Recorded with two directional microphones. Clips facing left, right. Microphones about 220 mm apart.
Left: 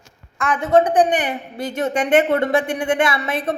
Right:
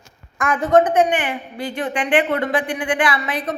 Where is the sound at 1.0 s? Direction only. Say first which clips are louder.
Left 1 dB; 35° left (ahead or behind).